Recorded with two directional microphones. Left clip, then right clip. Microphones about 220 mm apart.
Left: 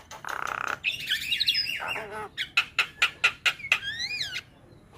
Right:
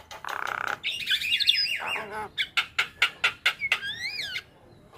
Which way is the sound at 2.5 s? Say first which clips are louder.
Left 4 dB; 5° left (ahead or behind).